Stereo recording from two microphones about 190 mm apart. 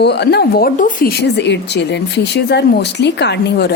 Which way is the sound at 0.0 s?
60° left (ahead or behind).